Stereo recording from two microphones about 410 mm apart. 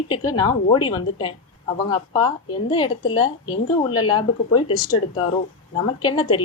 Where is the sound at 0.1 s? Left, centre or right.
Centre.